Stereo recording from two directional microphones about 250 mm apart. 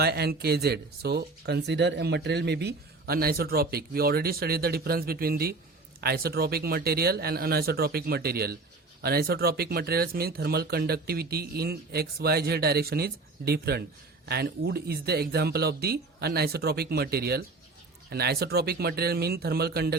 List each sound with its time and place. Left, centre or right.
0.0 s speech: right